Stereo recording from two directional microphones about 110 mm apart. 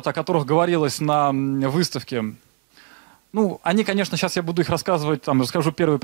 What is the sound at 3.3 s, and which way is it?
Speech, 20° right (ahead or behind).